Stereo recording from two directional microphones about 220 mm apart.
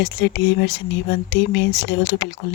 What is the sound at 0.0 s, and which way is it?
Speech, 55° left (ahead or behind).